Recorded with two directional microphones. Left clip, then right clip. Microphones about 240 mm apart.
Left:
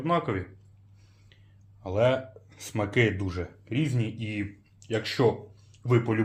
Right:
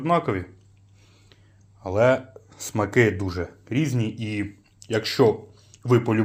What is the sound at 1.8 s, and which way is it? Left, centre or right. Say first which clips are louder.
Speech: right 5 dB; right.